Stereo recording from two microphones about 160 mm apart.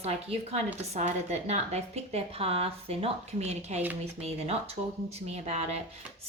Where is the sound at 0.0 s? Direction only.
40° right (ahead or behind).